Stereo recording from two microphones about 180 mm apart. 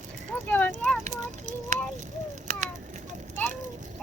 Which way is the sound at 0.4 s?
10° left (ahead or behind).